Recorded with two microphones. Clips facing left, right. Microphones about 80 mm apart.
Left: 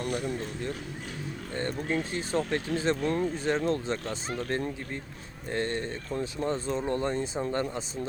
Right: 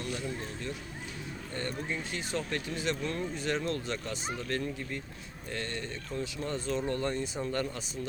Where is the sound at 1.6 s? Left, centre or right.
Left.